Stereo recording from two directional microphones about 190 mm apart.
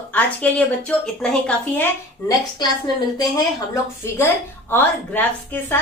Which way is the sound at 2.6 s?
20° left (ahead or behind).